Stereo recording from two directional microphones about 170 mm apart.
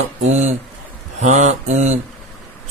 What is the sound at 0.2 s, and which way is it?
A man's voice, 45° right (ahead or behind).